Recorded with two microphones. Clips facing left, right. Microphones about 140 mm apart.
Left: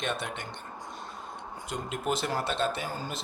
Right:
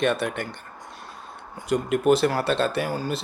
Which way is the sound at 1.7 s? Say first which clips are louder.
Right 12 dB; 70° right (ahead or behind).